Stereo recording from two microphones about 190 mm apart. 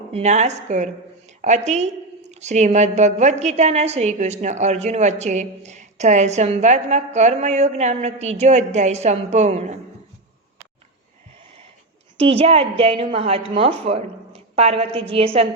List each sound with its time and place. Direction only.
0.1 s a woman's voice: 35° right (ahead or behind)
12.1 s a woman's voice: 30° right (ahead or behind)